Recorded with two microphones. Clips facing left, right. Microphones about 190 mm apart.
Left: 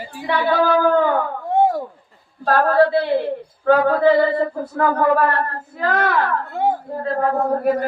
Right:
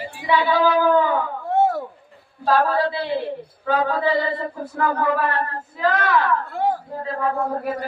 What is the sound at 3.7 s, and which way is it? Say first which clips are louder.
Male singing: left 7 dB; 55° left (ahead or behind).